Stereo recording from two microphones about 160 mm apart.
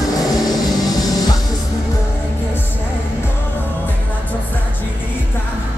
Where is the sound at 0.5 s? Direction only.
25° left (ahead or behind).